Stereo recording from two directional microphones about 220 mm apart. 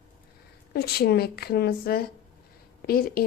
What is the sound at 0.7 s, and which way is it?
A woman's voice, 45° left (ahead or behind).